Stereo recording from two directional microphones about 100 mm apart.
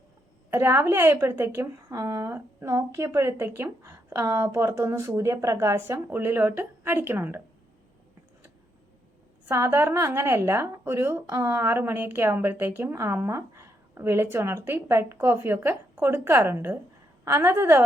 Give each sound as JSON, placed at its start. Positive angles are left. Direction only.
{"t": 0.5, "sound": "speech", "side_deg": -25}
{"t": 9.5, "sound": "speech", "side_deg": -25}